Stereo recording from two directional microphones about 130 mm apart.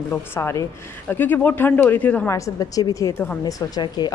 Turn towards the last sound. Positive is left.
turn(degrees=35)  # may be behind; listen again after turning